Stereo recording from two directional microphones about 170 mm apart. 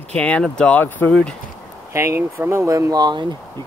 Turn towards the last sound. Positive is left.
turn(degrees=-25)  # may be behind; listen again after turning